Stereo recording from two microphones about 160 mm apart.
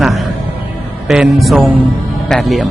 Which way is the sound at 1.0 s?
Centre (ahead or behind).